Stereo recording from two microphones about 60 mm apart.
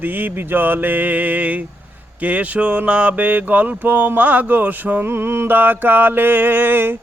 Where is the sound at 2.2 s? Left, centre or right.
Right.